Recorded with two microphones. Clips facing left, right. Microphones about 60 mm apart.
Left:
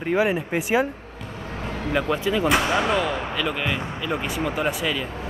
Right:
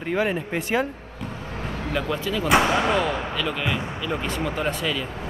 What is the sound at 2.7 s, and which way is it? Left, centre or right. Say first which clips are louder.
Speech: even; centre.